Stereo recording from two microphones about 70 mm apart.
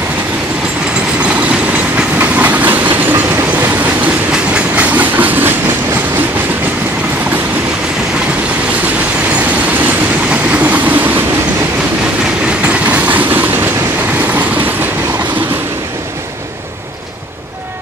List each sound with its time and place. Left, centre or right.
2.0 s train: right
4.6 s train: right
10.5 s train: right
12.6 s train: centre